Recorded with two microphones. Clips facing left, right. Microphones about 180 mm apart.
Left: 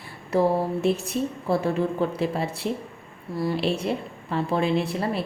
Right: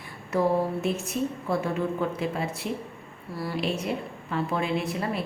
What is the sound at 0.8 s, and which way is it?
A woman's voice, 30° left (ahead or behind).